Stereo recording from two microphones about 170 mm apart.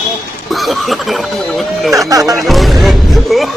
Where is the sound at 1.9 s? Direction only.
20° right (ahead or behind).